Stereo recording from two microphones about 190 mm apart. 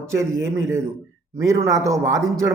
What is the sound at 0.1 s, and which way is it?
Speech, 15° right (ahead or behind).